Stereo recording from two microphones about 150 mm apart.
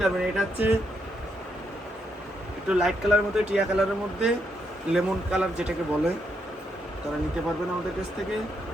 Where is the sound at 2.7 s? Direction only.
5° right (ahead or behind).